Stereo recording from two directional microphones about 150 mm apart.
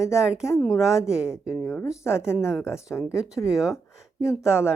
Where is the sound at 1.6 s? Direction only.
15° left (ahead or behind).